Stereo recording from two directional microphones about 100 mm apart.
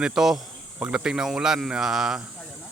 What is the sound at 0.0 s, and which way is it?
Speech, 5° right (ahead or behind).